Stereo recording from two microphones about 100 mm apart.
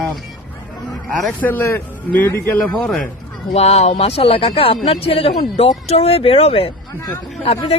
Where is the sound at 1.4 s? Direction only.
20° left (ahead or behind).